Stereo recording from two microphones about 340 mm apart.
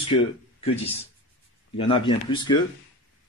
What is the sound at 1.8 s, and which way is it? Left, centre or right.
Speech, centre.